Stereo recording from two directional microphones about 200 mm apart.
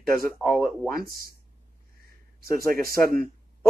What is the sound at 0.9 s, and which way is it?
Speech, 45° right (ahead or behind).